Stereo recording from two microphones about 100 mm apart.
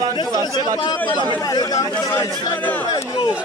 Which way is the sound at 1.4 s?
40° left (ahead or behind).